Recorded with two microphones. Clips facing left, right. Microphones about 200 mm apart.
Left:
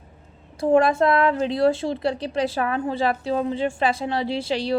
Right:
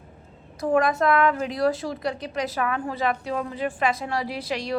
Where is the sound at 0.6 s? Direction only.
30° left (ahead or behind).